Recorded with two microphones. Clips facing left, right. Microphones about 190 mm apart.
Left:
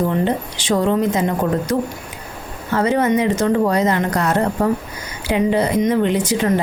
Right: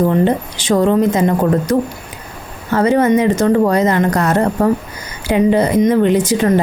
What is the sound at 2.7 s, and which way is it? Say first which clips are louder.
Speech: right 4 dB; 45° right (ahead or behind).